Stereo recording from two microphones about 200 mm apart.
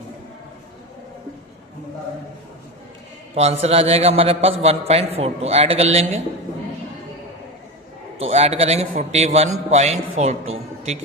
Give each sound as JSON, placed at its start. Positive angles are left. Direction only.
{"t": 3.3, "sound": "a man's voice", "side_deg": -30}
{"t": 8.2, "sound": "a man's voice", "side_deg": -30}